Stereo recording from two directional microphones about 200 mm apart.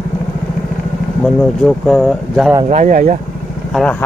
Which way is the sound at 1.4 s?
5° left (ahead or behind).